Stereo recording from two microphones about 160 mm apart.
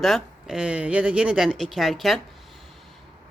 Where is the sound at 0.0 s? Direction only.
Centre (ahead or behind).